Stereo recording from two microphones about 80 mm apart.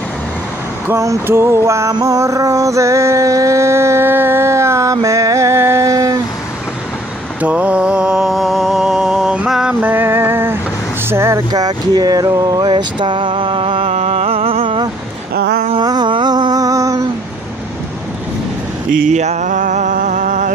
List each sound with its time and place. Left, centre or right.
0.9 s a sound: right
5.9 s a sound: right
7.4 s mantra: centre
9.5 s music: centre
9.8 s vehicle: right
11.1 s speech: right
11.3 s a sound: right
12.6 s mantra: right
15.8 s humming: right